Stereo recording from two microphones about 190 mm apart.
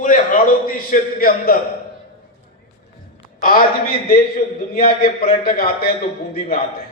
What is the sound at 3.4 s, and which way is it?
Speech, 50° left (ahead or behind).